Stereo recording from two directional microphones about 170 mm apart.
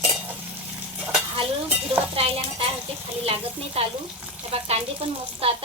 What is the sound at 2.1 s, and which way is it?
Speech, 35° right (ahead or behind).